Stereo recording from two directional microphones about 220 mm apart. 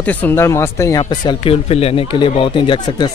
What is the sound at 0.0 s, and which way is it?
Speech, 10° left (ahead or behind).